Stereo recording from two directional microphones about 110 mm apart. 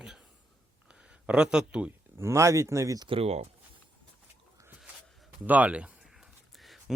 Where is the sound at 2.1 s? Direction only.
25° right (ahead or behind).